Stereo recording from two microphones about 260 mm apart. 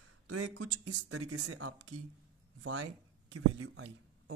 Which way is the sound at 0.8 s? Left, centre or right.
Right.